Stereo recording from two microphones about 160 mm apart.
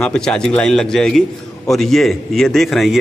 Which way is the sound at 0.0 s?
5° left (ahead or behind).